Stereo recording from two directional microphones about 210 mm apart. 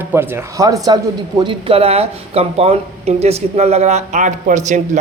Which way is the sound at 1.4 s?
25° right (ahead or behind).